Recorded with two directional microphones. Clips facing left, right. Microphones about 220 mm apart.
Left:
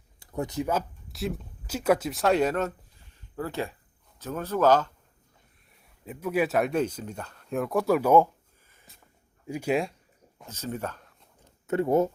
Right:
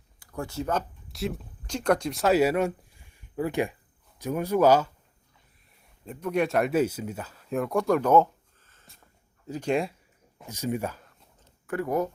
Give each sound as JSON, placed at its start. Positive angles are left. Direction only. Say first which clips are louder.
{"t": 0.2, "sound": "speech", "louder": "left 3 dB", "side_deg": 20}
{"t": 6.1, "sound": "speech", "louder": "even", "side_deg": 5}
{"t": 10.4, "sound": "speech", "louder": "right 4 dB", "side_deg": -15}
{"t": 11.4, "sound": "a sound", "louder": "left 4 dB", "side_deg": 20}